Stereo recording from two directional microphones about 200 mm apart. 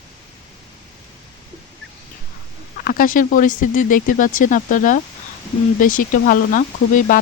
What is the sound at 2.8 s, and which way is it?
Speech, 45° left (ahead or behind).